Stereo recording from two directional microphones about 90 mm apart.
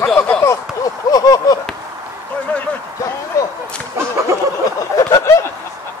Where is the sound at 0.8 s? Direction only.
45° left (ahead or behind).